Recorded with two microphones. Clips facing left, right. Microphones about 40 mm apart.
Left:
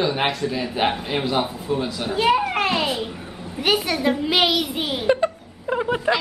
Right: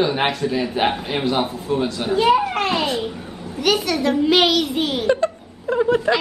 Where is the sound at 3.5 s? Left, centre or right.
Centre.